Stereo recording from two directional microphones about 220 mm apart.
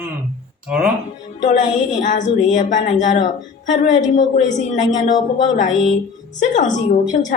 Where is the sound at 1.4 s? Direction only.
35° left (ahead or behind).